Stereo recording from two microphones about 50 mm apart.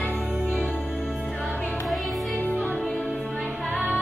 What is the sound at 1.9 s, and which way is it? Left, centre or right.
Music, centre.